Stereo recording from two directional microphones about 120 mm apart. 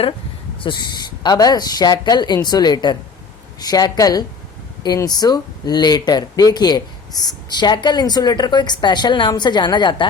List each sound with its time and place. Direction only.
0.6 s speech: 40° left (ahead or behind)